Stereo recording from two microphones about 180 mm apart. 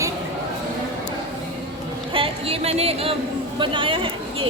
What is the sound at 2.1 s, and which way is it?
A woman's voice, 30° right (ahead or behind).